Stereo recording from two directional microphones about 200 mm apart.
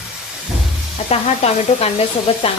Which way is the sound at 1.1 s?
30° left (ahead or behind).